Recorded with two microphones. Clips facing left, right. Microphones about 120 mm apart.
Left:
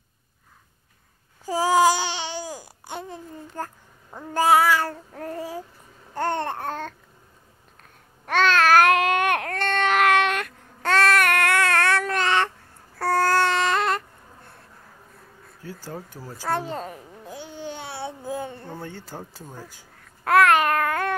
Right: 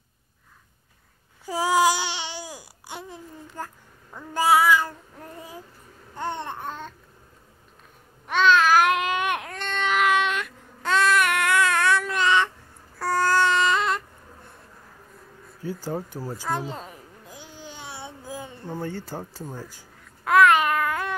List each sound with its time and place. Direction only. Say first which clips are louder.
1.4 s babbling: left 2 dB; 40° left (ahead or behind)
4.3 s child singing: left 1 dB; 50° left (ahead or behind); by 5.6 s 75° left (ahead or behind)
6.1 s babbling: left 5 dB; 85° left
8.4 s babbling: left 1 dB; 65° left (ahead or behind)
13.0 s a sound: left 1 dB; 60° left (ahead or behind)
15.6 s speech: right 6 dB; 15° right (ahead or behind)
16.7 s a sound: left 6 dB; 45° left (ahead or behind)
17.6 s babbling: left 6 dB; 60° left (ahead or behind)
18.8 s speech: right 4 dB; 5° right (ahead or behind)
20.2 s babbling: even; 55° left (ahead or behind)